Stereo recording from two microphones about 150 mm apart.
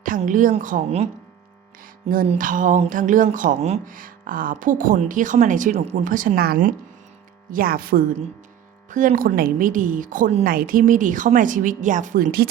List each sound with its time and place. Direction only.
0.2 s a woman's voice: 60° right (ahead or behind)
2.0 s a woman's voice: 50° right (ahead or behind)
2.4 s a woman's voice: 60° right (ahead or behind)
3.8 s speech: 65° right (ahead or behind); by 6.1 s 45° right (ahead or behind)
6.1 s speech: 80° right
8.9 s speech: 60° right (ahead or behind)
10.5 s speech: 75° right (ahead or behind)